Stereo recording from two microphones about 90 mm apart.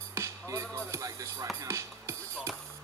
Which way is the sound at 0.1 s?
35° right (ahead or behind).